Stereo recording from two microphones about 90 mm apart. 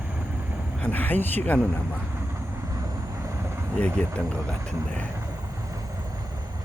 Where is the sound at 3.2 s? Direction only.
30° right (ahead or behind).